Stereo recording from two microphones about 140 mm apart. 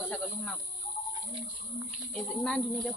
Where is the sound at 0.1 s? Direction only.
5° left (ahead or behind).